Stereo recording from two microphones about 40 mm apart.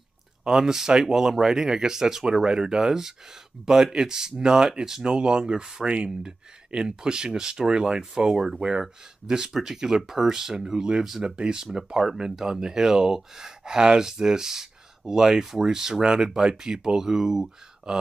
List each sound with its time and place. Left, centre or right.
0.4 s speech: centre